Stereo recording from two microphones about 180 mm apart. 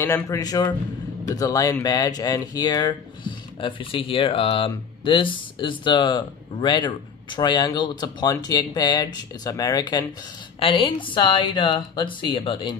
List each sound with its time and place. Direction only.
0.0 s a man's voice: 15° left (ahead or behind)